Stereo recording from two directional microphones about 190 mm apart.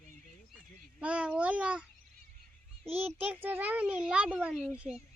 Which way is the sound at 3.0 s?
10° right (ahead or behind).